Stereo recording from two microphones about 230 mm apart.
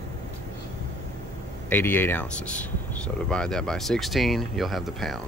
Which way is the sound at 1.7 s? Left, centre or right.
Centre.